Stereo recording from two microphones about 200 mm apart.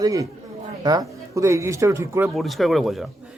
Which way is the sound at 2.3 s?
Centre (ahead or behind).